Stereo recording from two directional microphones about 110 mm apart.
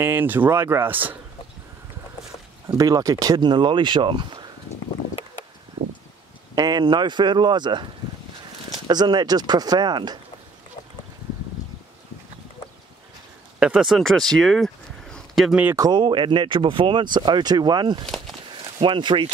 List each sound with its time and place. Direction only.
0.0 s speech: 20° right (ahead or behind)
2.8 s speech: 30° right (ahead or behind)
6.5 s speech: 35° right (ahead or behind)
13.6 s speech: 5° right (ahead or behind)
15.7 s speech: 35° right (ahead or behind)
16.0 s speech: 45° right (ahead or behind)
18.0 s speech: centre (ahead or behind)
18.5 s a sound: 50° right (ahead or behind)